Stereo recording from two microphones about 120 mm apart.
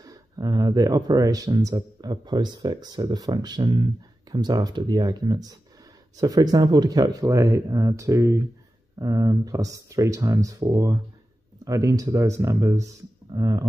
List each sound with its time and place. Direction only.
0.0 s speech: 30° right (ahead or behind)